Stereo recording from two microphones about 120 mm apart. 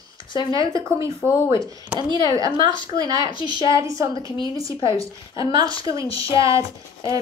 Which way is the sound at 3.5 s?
35° right (ahead or behind).